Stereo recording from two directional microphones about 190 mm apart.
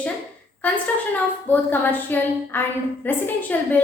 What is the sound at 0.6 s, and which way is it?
A woman's voice, 10° left (ahead or behind).